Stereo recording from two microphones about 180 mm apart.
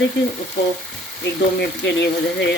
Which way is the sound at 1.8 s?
75° left (ahead or behind).